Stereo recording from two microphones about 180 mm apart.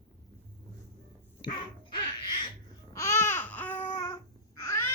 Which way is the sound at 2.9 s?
15° left (ahead or behind).